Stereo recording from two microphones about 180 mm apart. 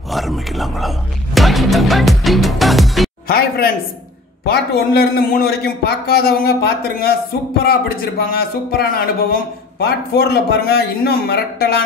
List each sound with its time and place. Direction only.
0.1 s music: centre (ahead or behind)
3.3 s a man's voice: 55° left (ahead or behind)